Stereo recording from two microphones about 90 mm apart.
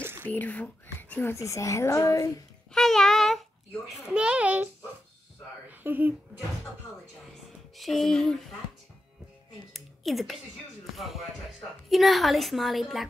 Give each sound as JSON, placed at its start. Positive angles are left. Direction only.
{"t": 0.0, "sound": "a sound", "side_deg": -25}
{"t": 0.3, "sound": "speech", "side_deg": 15}
{"t": 1.3, "sound": "speech", "side_deg": 35}
{"t": 2.7, "sound": "a woman's voice", "side_deg": 5}
{"t": 3.9, "sound": "a child's voice", "side_deg": -10}
{"t": 5.7, "sound": "speech", "side_deg": -20}
{"t": 7.7, "sound": "a woman's voice", "side_deg": 0}
{"t": 9.7, "sound": "a sound", "side_deg": 0}
{"t": 11.0, "sound": "a woman's voice", "side_deg": 0}